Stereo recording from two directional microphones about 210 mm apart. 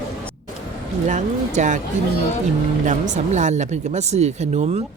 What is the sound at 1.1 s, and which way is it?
Speech, 35° right (ahead or behind).